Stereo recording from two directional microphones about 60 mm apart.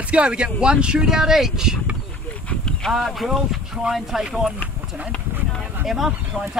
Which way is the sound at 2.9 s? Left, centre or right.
Centre.